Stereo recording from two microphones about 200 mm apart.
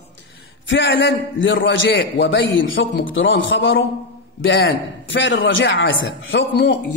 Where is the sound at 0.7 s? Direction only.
70° left (ahead or behind).